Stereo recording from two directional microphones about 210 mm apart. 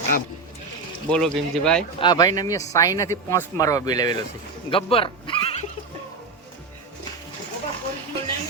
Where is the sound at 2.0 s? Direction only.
20° left (ahead or behind).